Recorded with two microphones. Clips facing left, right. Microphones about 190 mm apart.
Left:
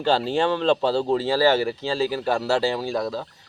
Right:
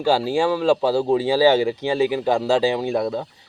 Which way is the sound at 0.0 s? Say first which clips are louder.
Right 2 dB; 10° right (ahead or behind).